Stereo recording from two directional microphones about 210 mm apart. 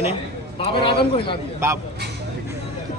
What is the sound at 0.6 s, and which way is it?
Speech, 25° left (ahead or behind).